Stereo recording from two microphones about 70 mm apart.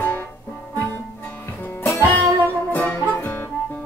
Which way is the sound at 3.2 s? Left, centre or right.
Left.